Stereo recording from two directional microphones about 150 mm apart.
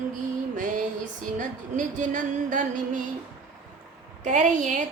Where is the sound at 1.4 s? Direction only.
60° right (ahead or behind).